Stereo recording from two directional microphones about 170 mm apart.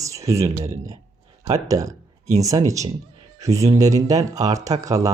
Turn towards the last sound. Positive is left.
turn(degrees=-20)  # may be behind; listen again after turning